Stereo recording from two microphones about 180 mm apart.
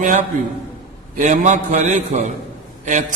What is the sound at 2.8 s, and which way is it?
Speech, 40° right (ahead or behind).